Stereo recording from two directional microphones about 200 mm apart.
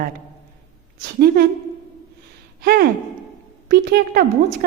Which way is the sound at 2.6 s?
50° right (ahead or behind).